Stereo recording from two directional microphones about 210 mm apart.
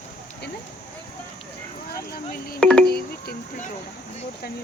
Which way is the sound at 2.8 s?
45° left (ahead or behind).